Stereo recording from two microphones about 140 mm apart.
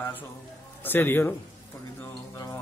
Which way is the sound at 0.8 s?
15° left (ahead or behind).